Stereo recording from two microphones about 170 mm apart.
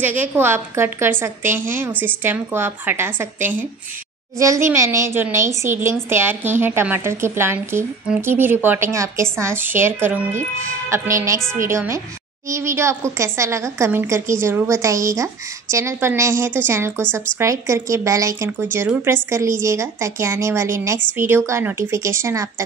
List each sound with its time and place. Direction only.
0.0 s a woman's voice: 10° right (ahead or behind)